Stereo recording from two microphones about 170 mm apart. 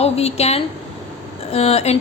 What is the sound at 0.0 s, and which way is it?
A woman's voice, 40° left (ahead or behind).